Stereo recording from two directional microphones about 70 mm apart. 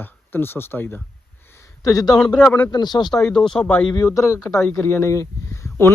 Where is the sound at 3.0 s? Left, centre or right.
Centre.